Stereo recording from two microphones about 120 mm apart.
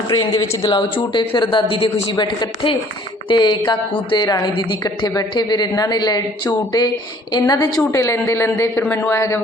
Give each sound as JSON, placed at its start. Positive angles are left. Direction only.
{"t": 0.1, "sound": "a woman's voice", "side_deg": 30}